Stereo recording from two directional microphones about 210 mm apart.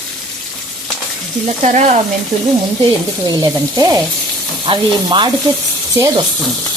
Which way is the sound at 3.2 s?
15° right (ahead or behind).